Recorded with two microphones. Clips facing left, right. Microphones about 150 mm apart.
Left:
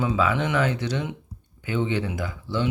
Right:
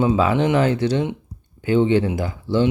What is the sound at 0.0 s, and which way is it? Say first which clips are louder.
Speech: right 6 dB; 30° right (ahead or behind).